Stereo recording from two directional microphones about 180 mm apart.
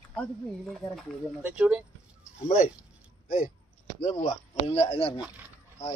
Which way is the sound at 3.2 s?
50° left (ahead or behind).